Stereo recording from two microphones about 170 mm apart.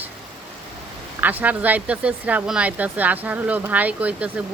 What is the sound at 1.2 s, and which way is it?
Speech, 10° right (ahead or behind).